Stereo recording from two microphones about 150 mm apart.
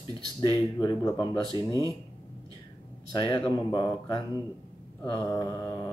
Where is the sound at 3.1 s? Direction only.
35° left (ahead or behind).